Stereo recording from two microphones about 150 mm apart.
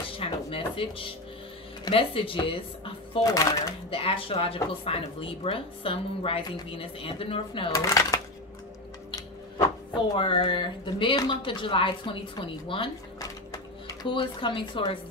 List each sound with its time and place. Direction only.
0.2 s a sound: 35° left (ahead or behind)
1.9 s speech: 35° left (ahead or behind)
3.2 s speech: 25° left (ahead or behind)
3.9 s speech: 35° left (ahead or behind)
7.7 s speech: 20° left (ahead or behind)
10.1 s speech: 35° left (ahead or behind)